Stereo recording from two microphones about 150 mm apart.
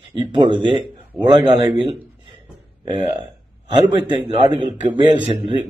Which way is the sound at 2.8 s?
30° right (ahead or behind).